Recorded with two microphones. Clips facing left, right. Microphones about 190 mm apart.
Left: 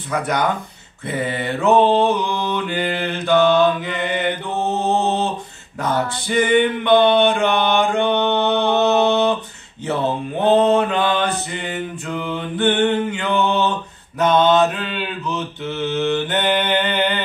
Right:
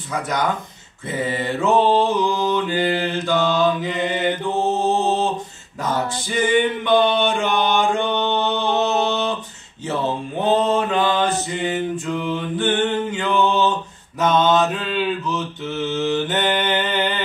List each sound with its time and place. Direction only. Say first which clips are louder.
1.0 s mantra: even; 60° left (ahead or behind)
5.8 s male singing: left 2 dB; 60° left (ahead or behind)
10.4 s mantra: left 4 dB; 60° left (ahead or behind)